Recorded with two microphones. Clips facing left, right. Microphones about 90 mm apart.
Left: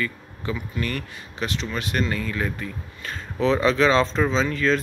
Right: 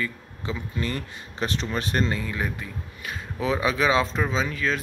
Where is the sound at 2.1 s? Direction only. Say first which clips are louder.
Left 2 dB; 20° right (ahead or behind).